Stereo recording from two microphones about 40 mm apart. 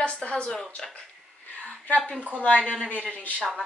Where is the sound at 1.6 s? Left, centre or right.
Left.